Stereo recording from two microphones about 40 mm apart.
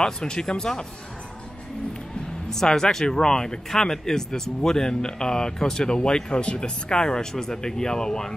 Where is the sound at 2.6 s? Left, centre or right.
Centre.